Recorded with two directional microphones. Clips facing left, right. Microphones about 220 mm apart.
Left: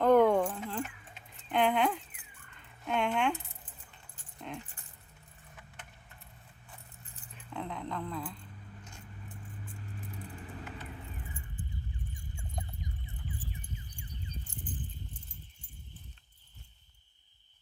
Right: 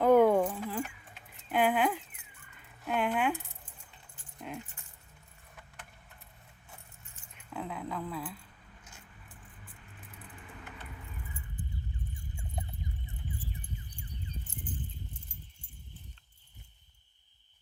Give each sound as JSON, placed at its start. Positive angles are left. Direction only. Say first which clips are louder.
{"t": 0.0, "sound": "keys jangling", "louder": "right 1 dB", "side_deg": -10}
{"t": 1.5, "sound": "a sound", "louder": "even", "side_deg": -5}
{"t": 4.4, "sound": "dog", "louder": "right 1 dB", "side_deg": -5}
{"t": 7.0, "sound": "keys jangling", "louder": "left 4 dB", "side_deg": 35}
{"t": 7.5, "sound": "a sound", "louder": "even", "side_deg": -5}
{"t": 10.2, "sound": "vehicle", "louder": "left 2 dB", "side_deg": 30}